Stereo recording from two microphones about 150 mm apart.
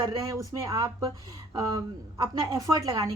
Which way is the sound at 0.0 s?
25° right (ahead or behind).